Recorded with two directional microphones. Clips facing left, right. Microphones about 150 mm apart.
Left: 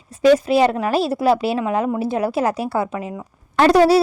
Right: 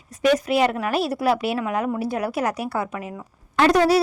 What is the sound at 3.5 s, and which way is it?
Speech, 35° left (ahead or behind).